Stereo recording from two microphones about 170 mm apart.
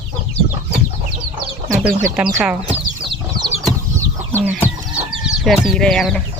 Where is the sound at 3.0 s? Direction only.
25° right (ahead or behind).